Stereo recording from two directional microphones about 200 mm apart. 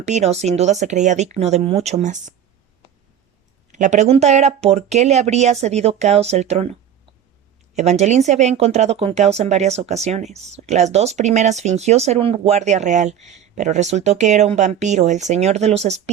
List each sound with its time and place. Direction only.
0.0 s speech: 35° right (ahead or behind)
3.7 s speech: 35° right (ahead or behind)